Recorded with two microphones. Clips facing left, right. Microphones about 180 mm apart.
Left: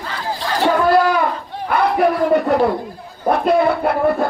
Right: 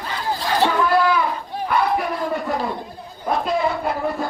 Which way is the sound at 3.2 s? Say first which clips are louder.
Left 6 dB; 60° left (ahead or behind).